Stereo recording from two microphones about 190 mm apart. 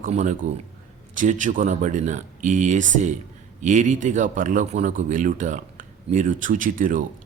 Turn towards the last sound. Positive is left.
turn(degrees=-45)  # may be behind; listen again after turning